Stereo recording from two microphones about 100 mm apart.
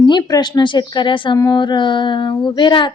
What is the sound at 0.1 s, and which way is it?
A woman's voice, 45° left (ahead or behind).